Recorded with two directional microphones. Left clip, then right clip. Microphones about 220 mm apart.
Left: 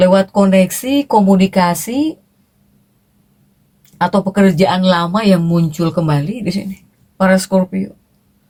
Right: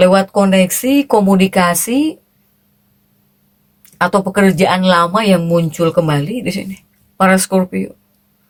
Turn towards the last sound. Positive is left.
turn(degrees=-35)  # may be behind; listen again after turning